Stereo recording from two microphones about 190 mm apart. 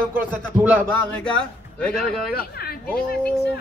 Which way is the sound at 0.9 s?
5° left (ahead or behind).